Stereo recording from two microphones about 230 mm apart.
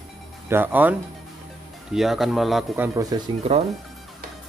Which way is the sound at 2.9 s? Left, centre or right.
Centre.